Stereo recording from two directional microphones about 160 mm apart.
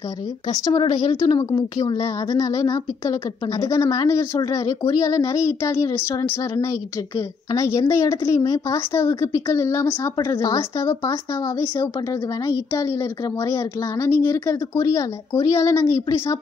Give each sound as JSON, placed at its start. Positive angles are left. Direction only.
{"t": 0.5, "sound": "a woman's voice", "side_deg": 25}